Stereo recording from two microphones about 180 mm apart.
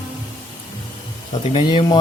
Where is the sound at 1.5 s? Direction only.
25° left (ahead or behind).